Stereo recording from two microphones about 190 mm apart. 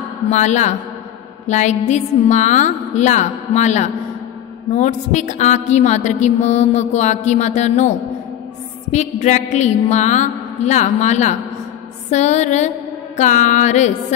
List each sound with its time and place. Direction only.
0.3 s mantra: 40° left (ahead or behind)
8.9 s mantra: 35° left (ahead or behind)
12.1 s music: 40° left (ahead or behind)